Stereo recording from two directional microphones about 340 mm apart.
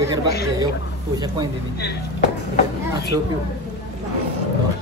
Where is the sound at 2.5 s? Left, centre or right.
Left.